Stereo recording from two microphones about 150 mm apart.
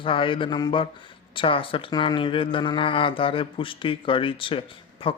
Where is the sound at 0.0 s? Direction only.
35° left (ahead or behind).